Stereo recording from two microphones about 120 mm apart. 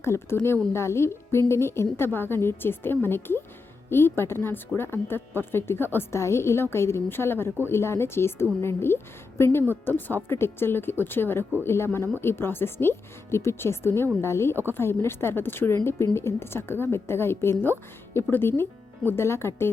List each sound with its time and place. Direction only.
0.0 s a woman's voice: 20° left (ahead or behind)